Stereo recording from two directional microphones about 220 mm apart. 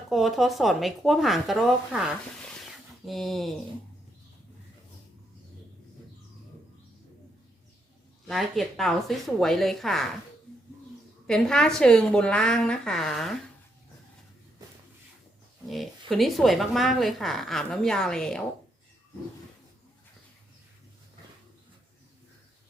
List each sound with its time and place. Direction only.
0.1 s speech: centre (ahead or behind)
8.3 s speech: centre (ahead or behind)
11.3 s speech: 5° left (ahead or behind)
15.7 s speech: centre (ahead or behind)